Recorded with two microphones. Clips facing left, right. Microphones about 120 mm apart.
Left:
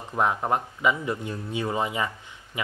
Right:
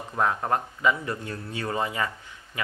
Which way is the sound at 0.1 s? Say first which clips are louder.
Left 1 dB; 15° left (ahead or behind).